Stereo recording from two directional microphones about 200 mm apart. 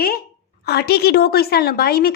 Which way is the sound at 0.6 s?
55° left (ahead or behind).